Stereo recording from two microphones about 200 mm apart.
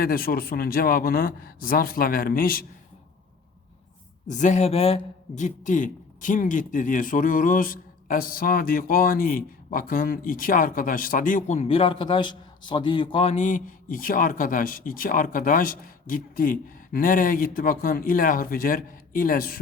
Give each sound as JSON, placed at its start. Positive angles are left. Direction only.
{"t": 0.0, "sound": "a man's voice", "side_deg": 45}
{"t": 4.3, "sound": "a man's voice", "side_deg": 35}